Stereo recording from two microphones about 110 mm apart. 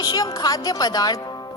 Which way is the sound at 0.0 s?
35° left (ahead or behind).